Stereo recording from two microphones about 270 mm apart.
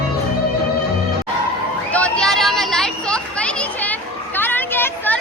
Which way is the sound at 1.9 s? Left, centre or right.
Centre.